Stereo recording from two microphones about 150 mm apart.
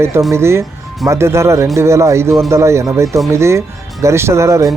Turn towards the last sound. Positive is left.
turn(degrees=-20)  # may be behind; listen again after turning